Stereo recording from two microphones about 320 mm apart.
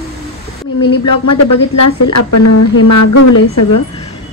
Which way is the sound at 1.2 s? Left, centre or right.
Left.